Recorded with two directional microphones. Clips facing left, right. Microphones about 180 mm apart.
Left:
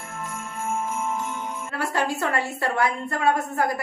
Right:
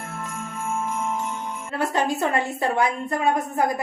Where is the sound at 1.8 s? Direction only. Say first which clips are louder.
Right 3 dB; 20° right (ahead or behind).